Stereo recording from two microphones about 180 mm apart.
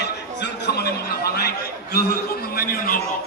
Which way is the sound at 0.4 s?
65° left (ahead or behind).